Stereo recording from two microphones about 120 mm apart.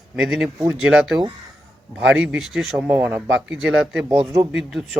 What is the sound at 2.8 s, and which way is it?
Speech, 15° right (ahead or behind).